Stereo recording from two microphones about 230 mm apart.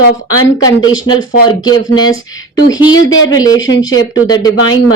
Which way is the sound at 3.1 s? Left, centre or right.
Left.